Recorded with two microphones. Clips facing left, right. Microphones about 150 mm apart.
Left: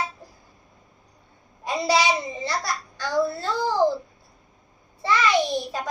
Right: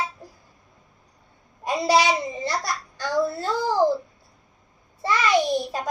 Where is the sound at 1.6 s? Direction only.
45° right (ahead or behind).